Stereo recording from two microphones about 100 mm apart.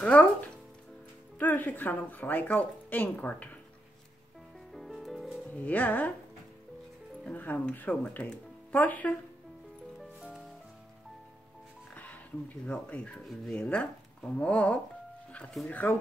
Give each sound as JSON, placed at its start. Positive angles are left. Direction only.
{"t": 0.0, "sound": "speech", "side_deg": 10}
{"t": 1.4, "sound": "speech", "side_deg": 20}
{"t": 4.7, "sound": "music", "side_deg": 0}
{"t": 5.5, "sound": "speech", "side_deg": 15}
{"t": 7.2, "sound": "speech", "side_deg": 15}
{"t": 11.9, "sound": "speech", "side_deg": 15}
{"t": 13.2, "sound": "speech", "side_deg": 0}
{"t": 13.6, "sound": "speech", "side_deg": 10}